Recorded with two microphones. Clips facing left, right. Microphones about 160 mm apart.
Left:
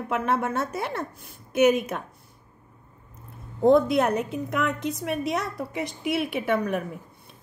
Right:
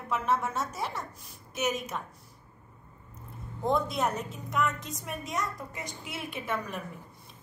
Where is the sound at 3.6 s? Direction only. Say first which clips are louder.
Left 10 dB; 60° left (ahead or behind).